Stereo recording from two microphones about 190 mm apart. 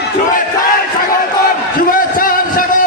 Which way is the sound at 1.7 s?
50° left (ahead or behind).